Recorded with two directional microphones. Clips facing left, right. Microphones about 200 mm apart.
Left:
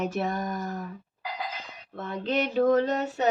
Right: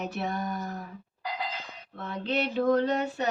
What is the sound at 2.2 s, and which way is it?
Speech, 45° left (ahead or behind).